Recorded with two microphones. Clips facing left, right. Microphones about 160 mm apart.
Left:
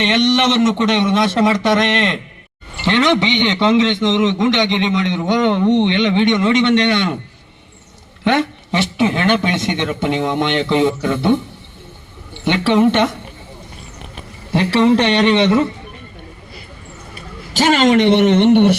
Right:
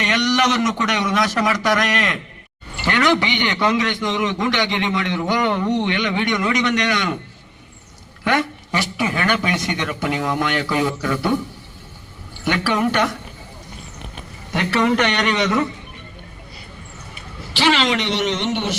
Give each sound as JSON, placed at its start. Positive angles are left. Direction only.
{"t": 0.0, "sound": "a man's voice", "side_deg": 25}
{"t": 8.2, "sound": "a man's voice", "side_deg": 25}
{"t": 14.5, "sound": "a man's voice", "side_deg": 30}
{"t": 17.5, "sound": "speech", "side_deg": 45}